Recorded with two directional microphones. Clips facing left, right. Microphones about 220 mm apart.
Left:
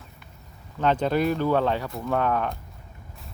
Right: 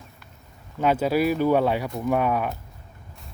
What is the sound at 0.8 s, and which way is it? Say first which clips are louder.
Speech: right 1 dB; 10° right (ahead or behind).